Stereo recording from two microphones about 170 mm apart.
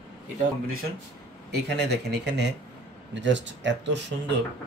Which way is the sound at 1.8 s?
80° right.